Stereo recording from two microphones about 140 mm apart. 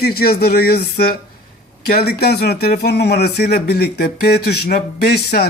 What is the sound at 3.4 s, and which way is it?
Speech, 90° left.